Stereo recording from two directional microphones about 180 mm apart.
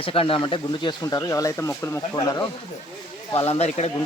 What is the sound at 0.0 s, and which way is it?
Speech, 30° left (ahead or behind).